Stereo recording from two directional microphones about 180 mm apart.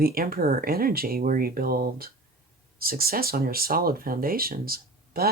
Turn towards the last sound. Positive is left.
turn(degrees=-55)  # may be behind; listen again after turning